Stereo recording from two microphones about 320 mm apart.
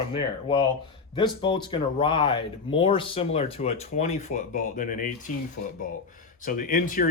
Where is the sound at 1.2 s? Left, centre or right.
Centre.